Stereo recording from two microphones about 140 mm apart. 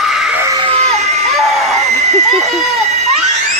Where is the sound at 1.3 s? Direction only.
Centre (ahead or behind).